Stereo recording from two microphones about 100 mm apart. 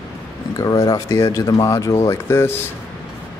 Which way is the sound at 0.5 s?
35° left (ahead or behind).